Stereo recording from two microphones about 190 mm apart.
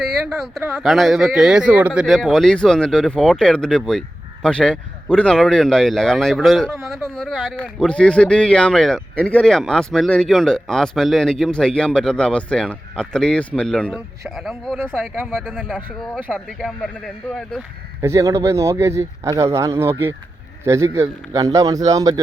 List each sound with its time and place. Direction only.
0.3 s speech: centre (ahead or behind)
15.7 s speech: 5° right (ahead or behind)
18.0 s speech: 15° right (ahead or behind)